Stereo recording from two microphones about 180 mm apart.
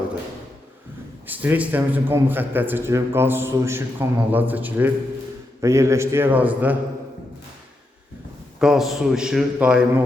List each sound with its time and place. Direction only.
1.3 s a man's voice: 10° right (ahead or behind)
8.5 s a man's voice: 5° right (ahead or behind)